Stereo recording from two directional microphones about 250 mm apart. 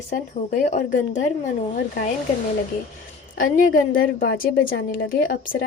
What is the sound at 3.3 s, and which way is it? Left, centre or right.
Speech, left.